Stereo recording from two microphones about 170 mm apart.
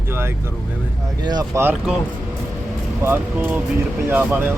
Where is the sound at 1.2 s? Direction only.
25° right (ahead or behind).